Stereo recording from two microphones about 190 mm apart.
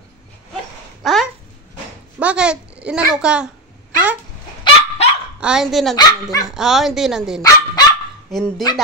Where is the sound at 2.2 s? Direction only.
5° right (ahead or behind).